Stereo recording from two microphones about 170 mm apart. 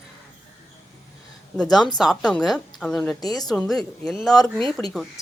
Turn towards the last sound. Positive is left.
turn(degrees=0)  # may be behind; listen again after turning